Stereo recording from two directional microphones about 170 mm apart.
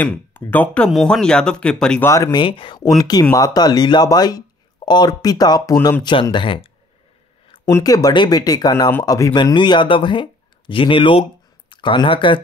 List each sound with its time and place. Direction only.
0.0 s speech: 10° left (ahead or behind)
2.0 s speech: 15° left (ahead or behind)
2.3 s speech: 30° left (ahead or behind)